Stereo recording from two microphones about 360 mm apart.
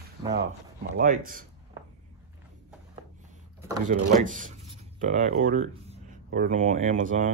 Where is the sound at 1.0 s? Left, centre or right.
Right.